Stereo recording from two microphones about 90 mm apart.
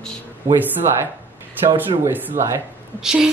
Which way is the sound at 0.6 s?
20° right (ahead or behind).